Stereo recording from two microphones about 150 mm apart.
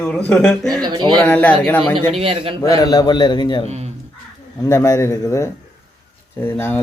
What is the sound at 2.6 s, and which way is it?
A man's voice, 25° left (ahead or behind).